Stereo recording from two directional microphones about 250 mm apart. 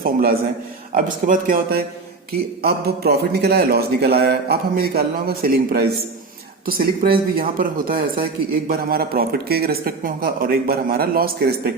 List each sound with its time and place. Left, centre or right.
0.0 s a man's voice: right